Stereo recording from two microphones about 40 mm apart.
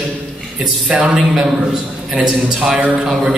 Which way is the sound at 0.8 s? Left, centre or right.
Right.